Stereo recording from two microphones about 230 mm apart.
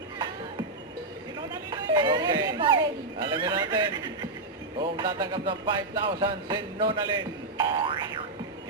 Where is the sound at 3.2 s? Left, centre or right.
Centre.